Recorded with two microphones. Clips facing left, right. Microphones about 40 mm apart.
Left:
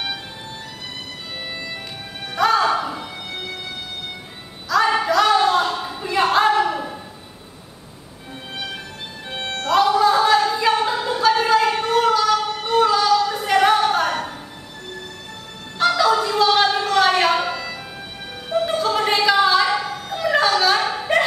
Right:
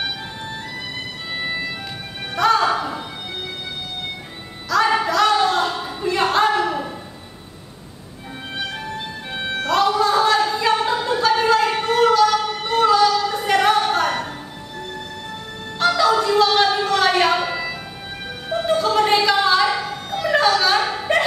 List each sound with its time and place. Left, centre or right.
1.3 s music: centre
2.3 s music: centre
4.6 s a sound: centre
9.3 s music: centre
15.8 s a sound: centre
18.5 s music: centre